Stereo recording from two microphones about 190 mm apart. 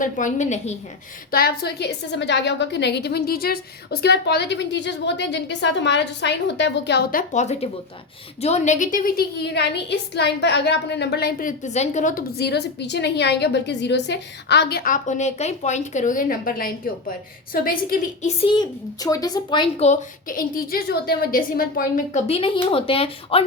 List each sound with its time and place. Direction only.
0.0 s a woman's voice: 40° left (ahead or behind)
1.3 s a woman's voice: 50° left (ahead or behind)
12.4 s a woman's voice: 60° left (ahead or behind)
18.4 s a woman's voice: 25° left (ahead or behind); by 22.2 s 50° left (ahead or behind)
22.3 s speech: 30° left (ahead or behind)